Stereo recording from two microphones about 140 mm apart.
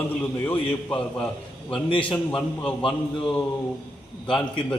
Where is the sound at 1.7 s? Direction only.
40° left (ahead or behind).